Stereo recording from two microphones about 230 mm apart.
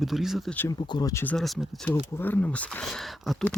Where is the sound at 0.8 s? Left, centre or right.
Centre.